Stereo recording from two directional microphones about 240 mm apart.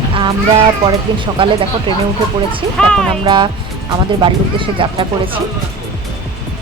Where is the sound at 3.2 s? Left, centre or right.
Centre.